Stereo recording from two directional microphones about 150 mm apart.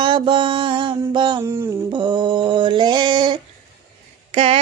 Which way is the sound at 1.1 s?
30° right (ahead or behind).